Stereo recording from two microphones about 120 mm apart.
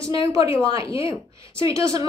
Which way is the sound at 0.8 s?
45° left (ahead or behind).